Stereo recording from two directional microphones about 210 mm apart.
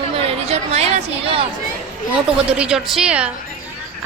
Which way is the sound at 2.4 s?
5° right (ahead or behind).